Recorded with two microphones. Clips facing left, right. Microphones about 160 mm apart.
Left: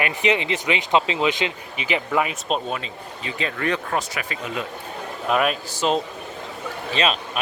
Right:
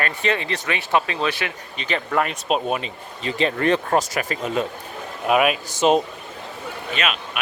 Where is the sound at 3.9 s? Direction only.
40° right (ahead or behind).